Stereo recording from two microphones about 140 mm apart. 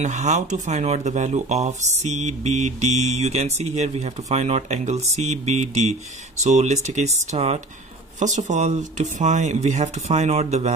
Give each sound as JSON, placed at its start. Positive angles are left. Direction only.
{"t": 0.0, "sound": "speech", "side_deg": -55}